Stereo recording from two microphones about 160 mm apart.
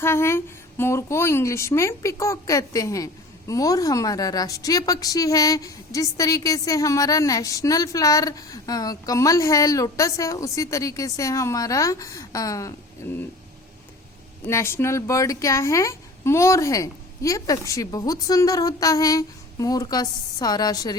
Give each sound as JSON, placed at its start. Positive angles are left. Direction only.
{"t": 0.0, "sound": "a woman's voice", "side_deg": 15}
{"t": 14.4, "sound": "a woman's voice", "side_deg": 15}